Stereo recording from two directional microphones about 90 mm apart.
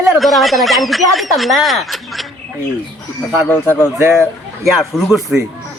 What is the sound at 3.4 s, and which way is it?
Speech, 25° left (ahead or behind).